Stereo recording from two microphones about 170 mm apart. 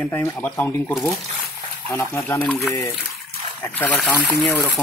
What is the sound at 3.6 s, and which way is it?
Speech, 10° left (ahead or behind).